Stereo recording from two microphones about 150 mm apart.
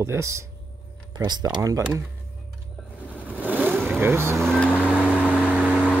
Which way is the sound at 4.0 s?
15° right (ahead or behind).